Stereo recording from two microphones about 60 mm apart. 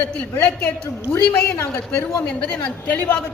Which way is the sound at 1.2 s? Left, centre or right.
Left.